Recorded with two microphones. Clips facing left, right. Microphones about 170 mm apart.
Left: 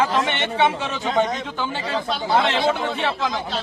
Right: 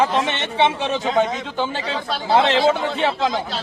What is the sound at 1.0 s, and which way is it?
Speech, centre (ahead or behind).